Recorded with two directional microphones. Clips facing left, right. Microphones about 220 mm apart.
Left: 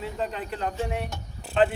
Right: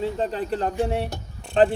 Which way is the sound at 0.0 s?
30° right (ahead or behind).